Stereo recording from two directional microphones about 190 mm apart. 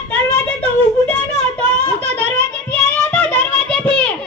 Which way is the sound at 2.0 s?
35° right (ahead or behind).